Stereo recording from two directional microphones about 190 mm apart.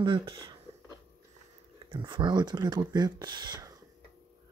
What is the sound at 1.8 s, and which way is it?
Speech, 25° right (ahead or behind).